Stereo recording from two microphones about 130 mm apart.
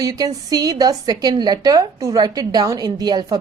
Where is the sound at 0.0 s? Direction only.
30° right (ahead or behind).